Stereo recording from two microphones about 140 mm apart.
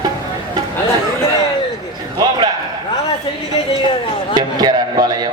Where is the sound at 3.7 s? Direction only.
35° left (ahead or behind).